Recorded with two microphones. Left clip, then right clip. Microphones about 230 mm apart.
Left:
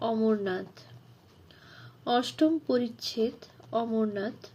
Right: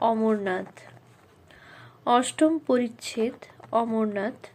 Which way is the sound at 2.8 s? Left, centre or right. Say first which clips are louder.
Right 2 dB; centre.